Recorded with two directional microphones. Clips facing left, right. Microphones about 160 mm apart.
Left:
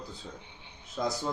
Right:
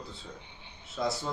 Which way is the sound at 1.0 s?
20° left (ahead or behind).